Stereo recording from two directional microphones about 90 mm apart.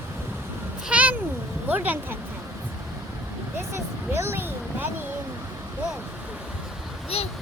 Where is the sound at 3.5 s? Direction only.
30° right (ahead or behind).